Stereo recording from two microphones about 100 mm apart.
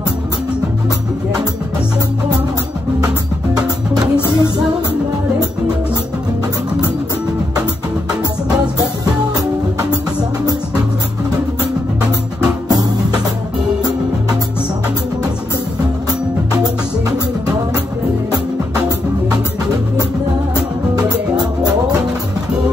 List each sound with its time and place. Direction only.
3.6 s music: 45° right (ahead or behind)